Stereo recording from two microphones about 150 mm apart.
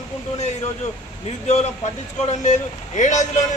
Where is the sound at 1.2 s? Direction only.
45° left (ahead or behind).